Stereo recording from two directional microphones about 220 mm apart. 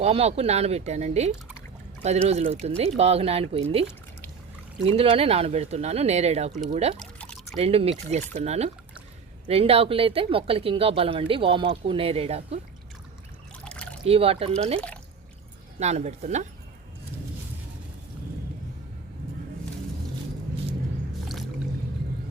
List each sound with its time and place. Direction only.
0.0 s speech: 30° right (ahead or behind)
4.9 s speech: 25° right (ahead or behind)
7.0 s pour: 5° left (ahead or behind)
7.5 s speech: 25° right (ahead or behind)
13.7 s a sound: 5° left (ahead or behind)
14.1 s speech: 25° right (ahead or behind)
15.8 s speech: 30° right (ahead or behind)